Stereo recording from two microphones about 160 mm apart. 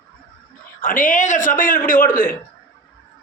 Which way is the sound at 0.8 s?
55° left (ahead or behind).